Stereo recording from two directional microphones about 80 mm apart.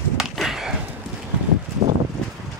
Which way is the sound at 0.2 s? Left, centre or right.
Centre.